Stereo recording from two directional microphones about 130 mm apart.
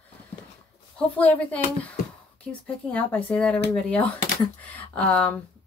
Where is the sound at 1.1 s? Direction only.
10° left (ahead or behind).